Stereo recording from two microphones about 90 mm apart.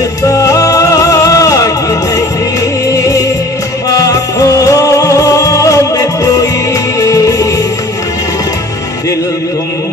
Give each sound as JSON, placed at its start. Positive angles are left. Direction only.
{"t": 0.2, "sound": "music", "side_deg": 40}